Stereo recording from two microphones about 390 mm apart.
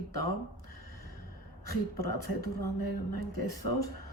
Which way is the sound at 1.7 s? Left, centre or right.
Left.